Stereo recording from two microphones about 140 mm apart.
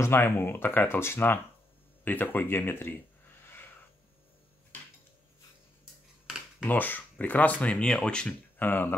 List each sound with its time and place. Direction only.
0.0 s speech: 15° left (ahead or behind)
6.6 s speech: 10° left (ahead or behind)